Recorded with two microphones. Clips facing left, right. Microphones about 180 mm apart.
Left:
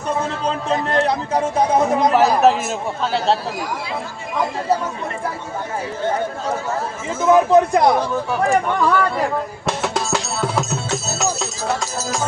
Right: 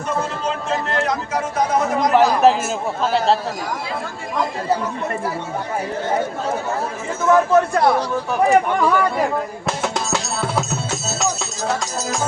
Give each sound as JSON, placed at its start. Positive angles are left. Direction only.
{"t": 0.9, "sound": "speech", "side_deg": 30}
{"t": 2.1, "sound": "a sound", "side_deg": 0}
{"t": 3.0, "sound": "speech", "side_deg": 0}
{"t": 7.3, "sound": "speech", "side_deg": 20}
{"t": 8.4, "sound": "speech", "side_deg": -10}
{"t": 9.6, "sound": "music", "side_deg": 0}